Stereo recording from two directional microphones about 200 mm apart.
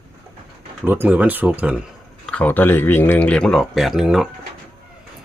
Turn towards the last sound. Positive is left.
turn(degrees=-5)  # may be behind; listen again after turning